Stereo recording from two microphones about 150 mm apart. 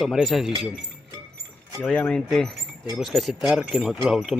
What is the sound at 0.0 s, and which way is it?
Speech, centre (ahead or behind).